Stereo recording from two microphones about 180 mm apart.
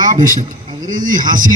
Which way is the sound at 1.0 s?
50° right (ahead or behind).